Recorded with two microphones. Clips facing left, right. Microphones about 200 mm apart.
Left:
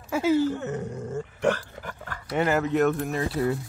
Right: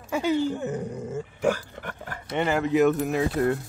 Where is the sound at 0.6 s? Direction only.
15° right (ahead or behind).